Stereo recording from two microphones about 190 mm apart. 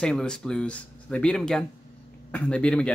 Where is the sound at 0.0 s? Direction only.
5° left (ahead or behind).